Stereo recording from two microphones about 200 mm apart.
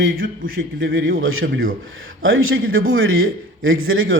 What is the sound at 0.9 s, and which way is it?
Speech, 50° right (ahead or behind).